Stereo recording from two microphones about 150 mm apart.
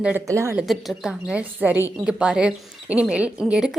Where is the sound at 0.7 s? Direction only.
Centre (ahead or behind).